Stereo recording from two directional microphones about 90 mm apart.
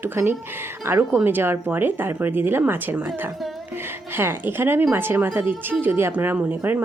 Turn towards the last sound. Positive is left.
turn(degrees=-20)  # may be behind; listen again after turning